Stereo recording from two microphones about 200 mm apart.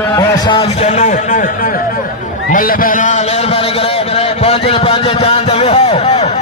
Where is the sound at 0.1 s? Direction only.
20° left (ahead or behind); by 1.8 s 45° left (ahead or behind).